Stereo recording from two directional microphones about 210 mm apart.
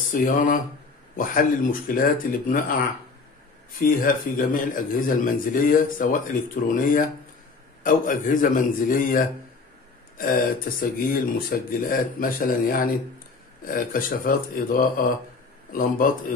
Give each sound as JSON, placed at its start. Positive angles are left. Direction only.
{"t": 0.1, "sound": "speech", "side_deg": 40}
{"t": 4.0, "sound": "speech", "side_deg": 40}